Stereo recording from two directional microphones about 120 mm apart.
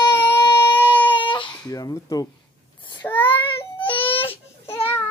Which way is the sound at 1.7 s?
30° left (ahead or behind).